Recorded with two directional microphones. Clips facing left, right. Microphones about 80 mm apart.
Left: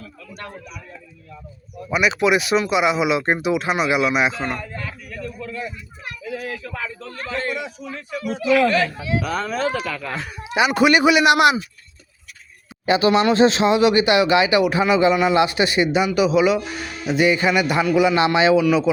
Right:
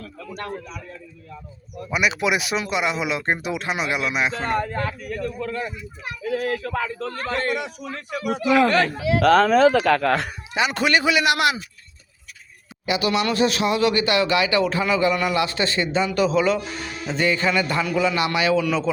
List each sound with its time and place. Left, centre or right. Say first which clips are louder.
1.9 s speech: left 4 dB; centre
4.4 s a man's voice: right 5 dB; right
9.1 s speech: right 8 dB; right
9.9 s speech: right 9 dB; right
10.5 s a man's voice: left 5 dB; centre
12.8 s a man's voice: left 6 dB; left; by 18.9 s centre